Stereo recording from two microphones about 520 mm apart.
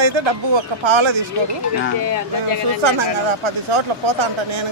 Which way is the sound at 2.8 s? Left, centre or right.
Right.